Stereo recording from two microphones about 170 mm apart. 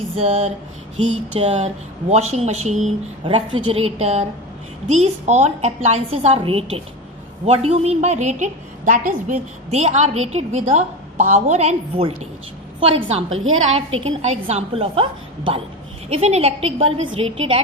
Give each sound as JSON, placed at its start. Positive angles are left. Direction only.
{"t": 0.2, "sound": "a woman's voice", "side_deg": -40}
{"t": 16.0, "sound": "a woman's voice", "side_deg": -35}